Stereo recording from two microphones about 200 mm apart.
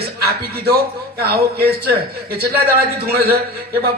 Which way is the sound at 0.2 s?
50° right (ahead or behind).